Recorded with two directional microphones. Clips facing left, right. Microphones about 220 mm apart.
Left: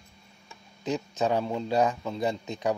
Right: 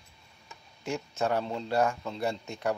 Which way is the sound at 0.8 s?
15° left (ahead or behind).